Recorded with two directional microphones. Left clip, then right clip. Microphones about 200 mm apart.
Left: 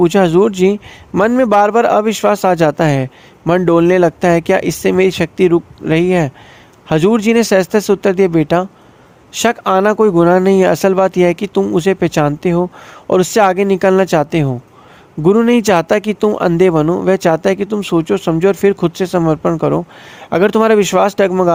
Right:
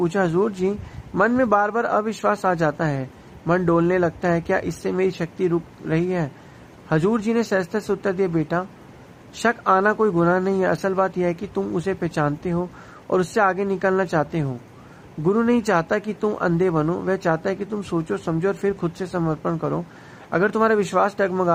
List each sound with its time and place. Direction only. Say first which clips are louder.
0.0 s a man's voice: left 10 dB; 45° left (ahead or behind)